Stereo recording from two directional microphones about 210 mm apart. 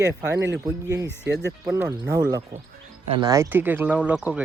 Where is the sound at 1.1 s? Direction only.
55° right (ahead or behind).